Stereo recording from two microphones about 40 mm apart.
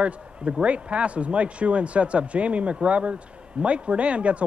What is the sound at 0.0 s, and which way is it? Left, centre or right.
A man's voice, right.